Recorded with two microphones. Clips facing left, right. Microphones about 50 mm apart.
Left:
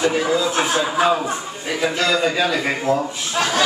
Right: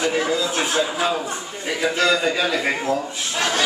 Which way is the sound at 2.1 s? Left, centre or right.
Centre.